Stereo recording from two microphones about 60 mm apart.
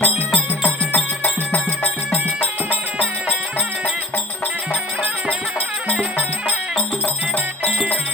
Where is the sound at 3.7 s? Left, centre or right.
Centre.